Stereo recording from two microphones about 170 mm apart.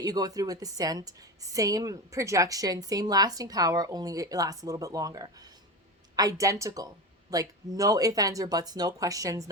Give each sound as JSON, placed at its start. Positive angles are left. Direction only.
{"t": 0.0, "sound": "a woman's voice", "side_deg": -20}